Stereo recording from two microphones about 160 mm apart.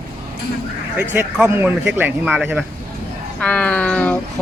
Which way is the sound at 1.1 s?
10° right (ahead or behind).